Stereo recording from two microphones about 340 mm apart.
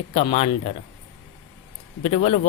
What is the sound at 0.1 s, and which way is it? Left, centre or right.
Speech, centre.